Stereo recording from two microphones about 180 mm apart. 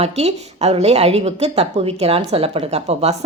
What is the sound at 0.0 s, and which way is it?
A woman's voice, 35° right (ahead or behind).